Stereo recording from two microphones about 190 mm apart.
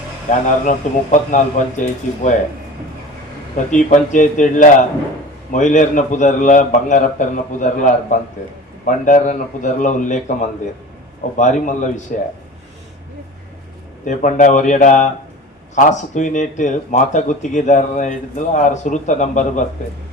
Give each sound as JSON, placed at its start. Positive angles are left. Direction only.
{"t": 0.3, "sound": "speech", "side_deg": 40}
{"t": 3.7, "sound": "speech", "side_deg": 40}
{"t": 14.0, "sound": "speech", "side_deg": 40}